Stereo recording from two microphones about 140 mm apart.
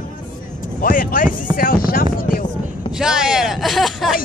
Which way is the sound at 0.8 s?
85° left.